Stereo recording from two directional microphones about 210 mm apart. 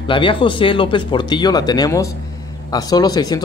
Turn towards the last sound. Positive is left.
turn(degrees=20)  # may be behind; listen again after turning